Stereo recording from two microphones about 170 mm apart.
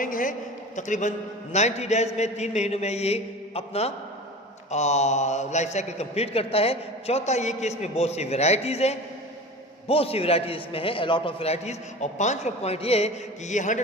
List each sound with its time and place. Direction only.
0.0 s a man's voice: 50° left (ahead or behind)